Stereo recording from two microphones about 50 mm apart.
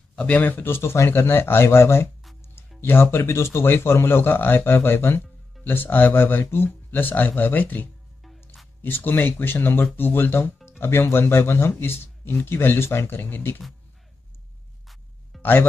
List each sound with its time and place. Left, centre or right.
0.2 s speech: left
0.7 s speech: left
15.3 s music: centre